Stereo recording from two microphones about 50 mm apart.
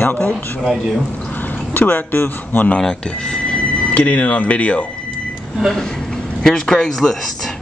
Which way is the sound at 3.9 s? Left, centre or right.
Left.